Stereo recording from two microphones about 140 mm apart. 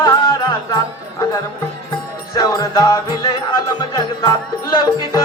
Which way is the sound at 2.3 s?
30° left (ahead or behind).